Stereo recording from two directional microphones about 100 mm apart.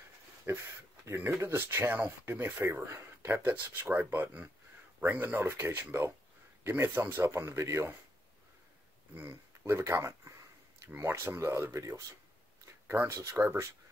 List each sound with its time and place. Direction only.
0.5 s speech: 20° right (ahead or behind)
9.1 s speech: 20° right (ahead or behind)